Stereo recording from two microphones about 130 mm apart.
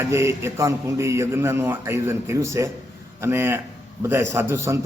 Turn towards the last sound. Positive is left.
turn(degrees=-20)  # may be behind; listen again after turning